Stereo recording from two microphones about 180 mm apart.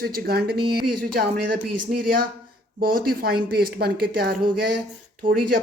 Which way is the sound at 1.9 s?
55° right (ahead or behind).